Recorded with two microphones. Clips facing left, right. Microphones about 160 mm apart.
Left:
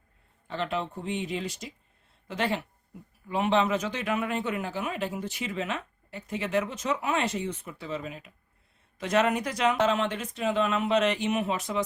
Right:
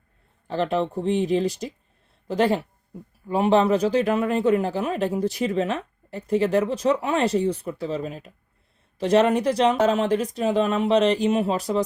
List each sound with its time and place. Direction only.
0.4 s a man's voice: 35° right (ahead or behind)